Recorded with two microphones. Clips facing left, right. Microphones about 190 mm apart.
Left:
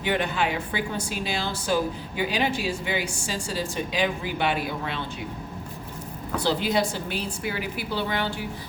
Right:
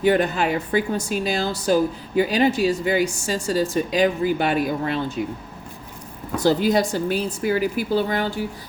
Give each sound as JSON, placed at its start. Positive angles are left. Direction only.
{"t": 0.0, "sound": "a woman's voice", "side_deg": -40}
{"t": 6.4, "sound": "a woman's voice", "side_deg": -45}